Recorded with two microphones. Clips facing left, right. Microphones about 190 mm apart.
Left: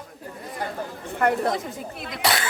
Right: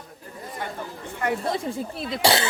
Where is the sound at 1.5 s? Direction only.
30° right (ahead or behind).